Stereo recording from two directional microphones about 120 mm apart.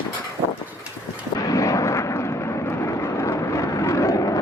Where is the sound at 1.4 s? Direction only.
30° left (ahead or behind).